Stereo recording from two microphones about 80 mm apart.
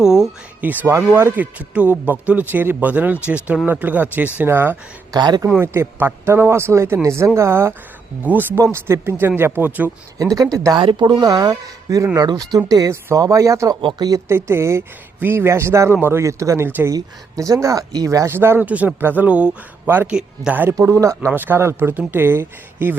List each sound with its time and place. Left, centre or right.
0.0 s a sound: centre
0.6 s speech: right
0.9 s speech: right
5.1 s speech: right
5.5 s speech: right
8.2 s speech: centre
8.5 s speech: right
10.3 s speech: right
10.8 s speech: right
14.3 s speech: right
18.3 s speech: right; by 20.5 s centre
20.5 s speech: right
20.7 s speech: right
21.2 s speech: right